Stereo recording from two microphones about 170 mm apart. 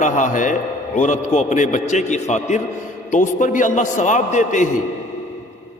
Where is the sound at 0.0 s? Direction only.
45° left (ahead or behind).